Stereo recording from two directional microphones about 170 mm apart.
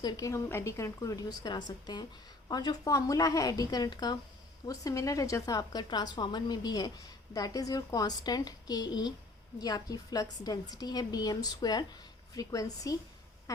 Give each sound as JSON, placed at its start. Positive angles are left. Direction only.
{"t": 0.0, "sound": "a woman's voice", "side_deg": 20}